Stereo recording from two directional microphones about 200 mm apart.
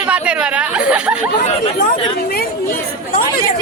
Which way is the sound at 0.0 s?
5° right (ahead or behind).